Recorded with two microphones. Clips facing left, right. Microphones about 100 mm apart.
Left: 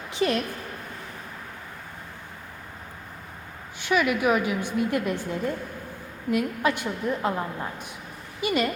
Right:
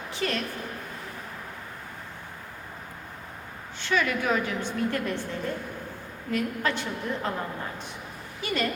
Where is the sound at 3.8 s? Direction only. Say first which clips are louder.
Left 4 dB; 10° left (ahead or behind).